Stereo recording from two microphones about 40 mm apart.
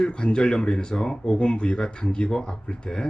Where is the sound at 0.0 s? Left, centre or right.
Left.